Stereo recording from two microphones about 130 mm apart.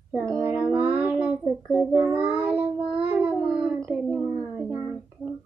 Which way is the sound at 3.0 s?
10° right (ahead or behind).